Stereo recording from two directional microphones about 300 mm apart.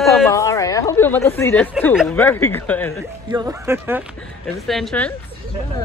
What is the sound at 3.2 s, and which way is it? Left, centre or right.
Speech, centre.